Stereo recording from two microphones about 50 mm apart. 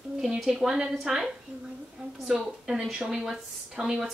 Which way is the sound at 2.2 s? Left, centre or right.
Centre.